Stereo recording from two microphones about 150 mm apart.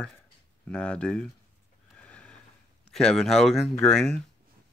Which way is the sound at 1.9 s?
10° left (ahead or behind).